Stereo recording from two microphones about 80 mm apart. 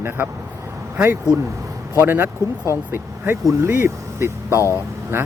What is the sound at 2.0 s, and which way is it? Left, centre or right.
Speech, right.